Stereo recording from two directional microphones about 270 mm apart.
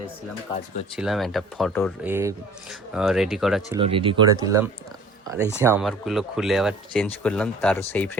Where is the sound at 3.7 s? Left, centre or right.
Centre.